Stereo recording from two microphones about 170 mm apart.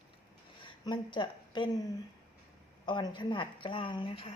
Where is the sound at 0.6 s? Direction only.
30° left (ahead or behind).